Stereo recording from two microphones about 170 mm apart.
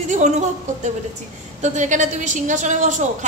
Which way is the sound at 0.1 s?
45° right (ahead or behind).